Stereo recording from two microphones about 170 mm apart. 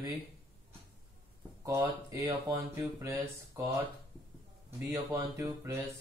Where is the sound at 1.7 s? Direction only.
15° right (ahead or behind).